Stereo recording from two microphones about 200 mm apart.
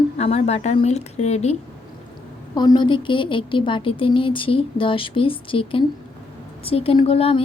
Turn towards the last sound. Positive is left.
turn(degrees=30)  # may be behind; listen again after turning